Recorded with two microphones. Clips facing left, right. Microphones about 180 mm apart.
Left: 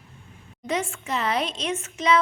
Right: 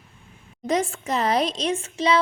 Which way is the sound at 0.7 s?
40° right (ahead or behind).